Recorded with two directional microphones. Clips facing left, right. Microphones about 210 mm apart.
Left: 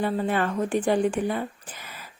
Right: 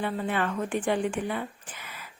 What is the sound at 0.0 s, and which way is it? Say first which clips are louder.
Speech: left 4 dB; 40° left (ahead or behind).